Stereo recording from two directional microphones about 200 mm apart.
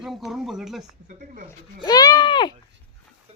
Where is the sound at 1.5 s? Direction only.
20° left (ahead or behind).